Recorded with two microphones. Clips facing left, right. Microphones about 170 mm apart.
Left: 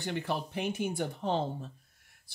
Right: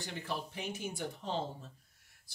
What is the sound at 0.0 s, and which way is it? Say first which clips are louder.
Speech: left 6 dB; 60° left (ahead or behind).